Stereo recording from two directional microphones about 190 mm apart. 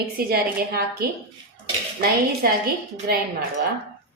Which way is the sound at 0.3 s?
55° right (ahead or behind).